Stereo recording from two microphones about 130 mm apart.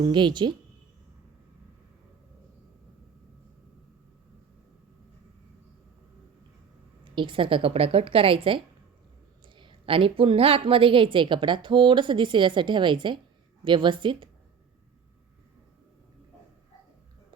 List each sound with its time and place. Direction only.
0.0 s a woman's voice: 35° right (ahead or behind)
7.0 s a woman's voice: 40° right (ahead or behind)